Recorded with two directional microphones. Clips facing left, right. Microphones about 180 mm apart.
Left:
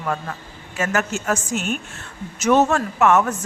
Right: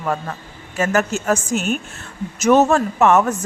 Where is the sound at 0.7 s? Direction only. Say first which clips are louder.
Right 4 dB; 35° right (ahead or behind).